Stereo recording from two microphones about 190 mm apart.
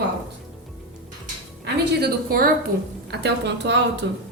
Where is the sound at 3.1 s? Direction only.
65° right (ahead or behind).